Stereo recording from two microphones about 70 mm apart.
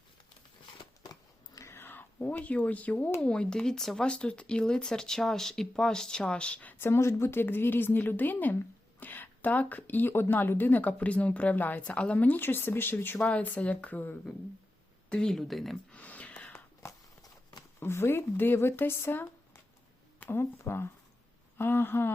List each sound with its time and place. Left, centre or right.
1.1 s a sound: left
1.7 s speech: left
15.1 s speech: centre
15.9 s a sound: left
17.7 s speech: left
20.3 s speech: left